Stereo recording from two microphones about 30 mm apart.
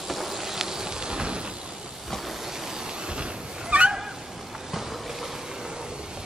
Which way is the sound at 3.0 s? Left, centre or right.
Right.